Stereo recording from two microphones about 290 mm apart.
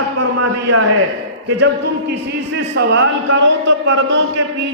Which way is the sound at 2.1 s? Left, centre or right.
Right.